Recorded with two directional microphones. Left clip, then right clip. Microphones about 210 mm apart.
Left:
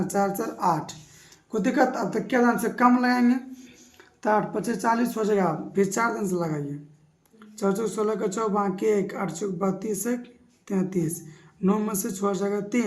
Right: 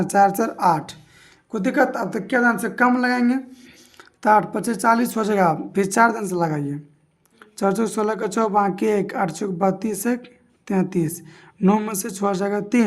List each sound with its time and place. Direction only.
0.0 s speech: 50° right (ahead or behind)
1.5 s speech: 30° right (ahead or behind); by 12.8 s 50° right (ahead or behind)